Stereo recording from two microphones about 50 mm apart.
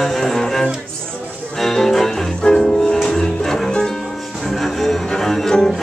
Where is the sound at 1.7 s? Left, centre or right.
Centre.